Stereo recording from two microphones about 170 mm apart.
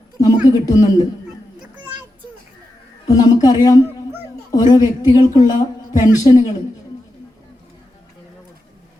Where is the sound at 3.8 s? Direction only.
15° right (ahead or behind).